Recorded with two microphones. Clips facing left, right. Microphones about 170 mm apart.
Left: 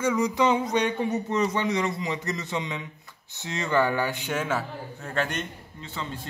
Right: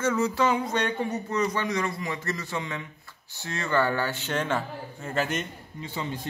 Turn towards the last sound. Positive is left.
turn(degrees=-10)  # may be behind; listen again after turning